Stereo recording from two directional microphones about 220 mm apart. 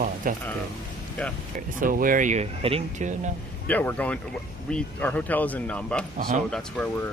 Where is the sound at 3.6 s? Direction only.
5° left (ahead or behind).